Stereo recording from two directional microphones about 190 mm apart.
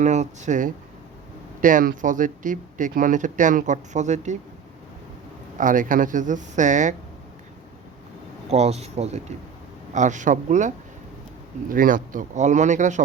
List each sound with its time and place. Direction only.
0.0 s speech: 40° right (ahead or behind)
5.5 s speech: 45° right (ahead or behind)
8.4 s speech: 35° right (ahead or behind)